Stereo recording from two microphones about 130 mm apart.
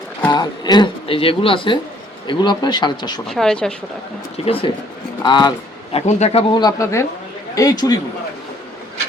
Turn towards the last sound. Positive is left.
turn(degrees=30)  # may be behind; listen again after turning